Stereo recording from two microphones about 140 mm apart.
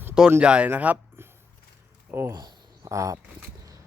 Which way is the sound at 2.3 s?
25° right (ahead or behind).